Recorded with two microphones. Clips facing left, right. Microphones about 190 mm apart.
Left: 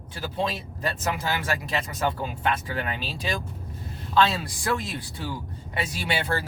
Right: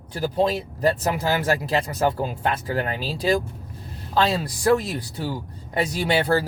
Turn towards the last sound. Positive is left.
turn(degrees=-40)  # may be behind; listen again after turning